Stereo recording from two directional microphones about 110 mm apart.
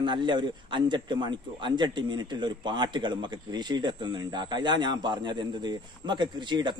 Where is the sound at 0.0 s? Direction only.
45° right (ahead or behind).